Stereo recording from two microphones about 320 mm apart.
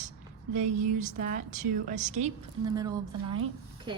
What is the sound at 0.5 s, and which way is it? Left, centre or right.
A woman's voice, right.